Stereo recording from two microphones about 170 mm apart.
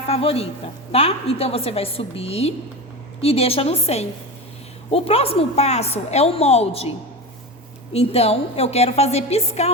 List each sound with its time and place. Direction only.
0.1 s a woman's voice: 35° left (ahead or behind)
7.9 s a woman's voice: 35° left (ahead or behind)